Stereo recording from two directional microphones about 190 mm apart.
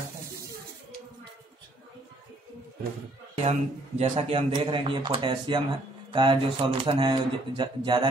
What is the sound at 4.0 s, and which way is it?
Speech, 30° right (ahead or behind).